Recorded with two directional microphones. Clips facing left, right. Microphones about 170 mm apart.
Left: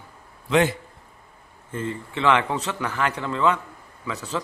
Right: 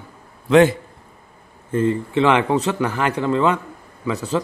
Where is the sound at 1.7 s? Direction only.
75° right (ahead or behind).